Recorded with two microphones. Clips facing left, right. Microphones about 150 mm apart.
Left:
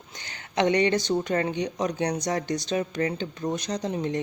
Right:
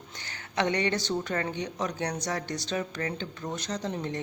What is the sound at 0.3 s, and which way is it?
Speech, 20° left (ahead or behind).